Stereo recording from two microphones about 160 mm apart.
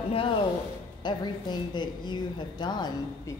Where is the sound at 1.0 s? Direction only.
25° left (ahead or behind).